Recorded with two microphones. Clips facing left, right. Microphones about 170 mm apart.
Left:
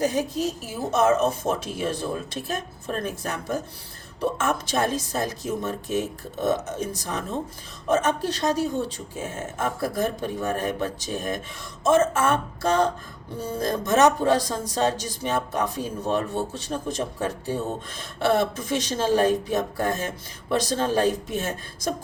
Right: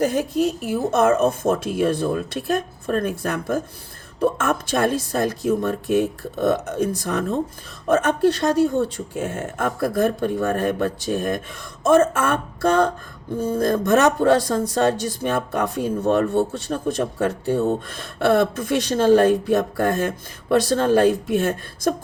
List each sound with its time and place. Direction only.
0.0 s speech: 55° right (ahead or behind)